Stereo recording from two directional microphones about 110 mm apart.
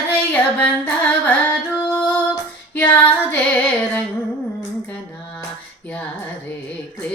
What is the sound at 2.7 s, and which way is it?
Child singing, 15° left (ahead or behind).